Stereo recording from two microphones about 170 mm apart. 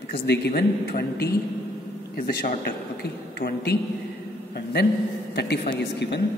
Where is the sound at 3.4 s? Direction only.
70° left (ahead or behind).